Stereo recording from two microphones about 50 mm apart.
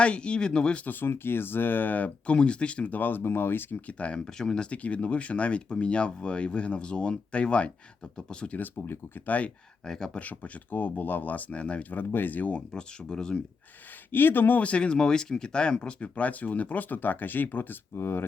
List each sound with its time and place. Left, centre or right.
0.0 s speech: left
0.9 s speech: left
2.9 s speech: left
3.8 s speech: left; by 4.7 s centre
4.7 s speech: left
8.4 s speech: left
9.8 s speech: centre
10.2 s speech: left
11.9 s speech: left
12.5 s speech: centre
14.1 s speech: left
14.6 s speech: left
17.9 s speech: left